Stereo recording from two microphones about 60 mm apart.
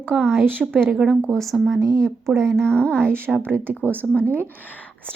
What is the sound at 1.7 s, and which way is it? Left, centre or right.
Speech, right.